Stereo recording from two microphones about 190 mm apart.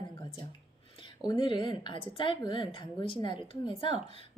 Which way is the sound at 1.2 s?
25° left (ahead or behind).